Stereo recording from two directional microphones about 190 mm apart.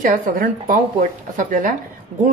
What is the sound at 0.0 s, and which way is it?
Speech, 45° right (ahead or behind).